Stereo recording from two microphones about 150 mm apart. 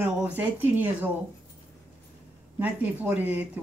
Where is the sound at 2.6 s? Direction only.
10° right (ahead or behind).